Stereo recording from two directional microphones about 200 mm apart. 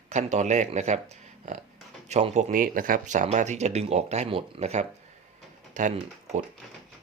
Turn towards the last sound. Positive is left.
turn(degrees=-30)  # may be behind; listen again after turning